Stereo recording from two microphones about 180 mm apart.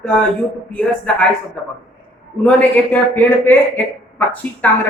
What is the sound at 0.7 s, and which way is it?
Speech, 5° left (ahead or behind).